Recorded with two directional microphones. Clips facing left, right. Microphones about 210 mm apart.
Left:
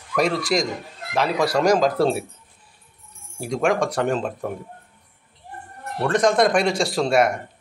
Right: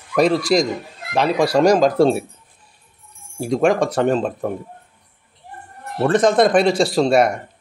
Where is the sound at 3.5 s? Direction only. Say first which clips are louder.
Right 5 dB; 35° right (ahead or behind).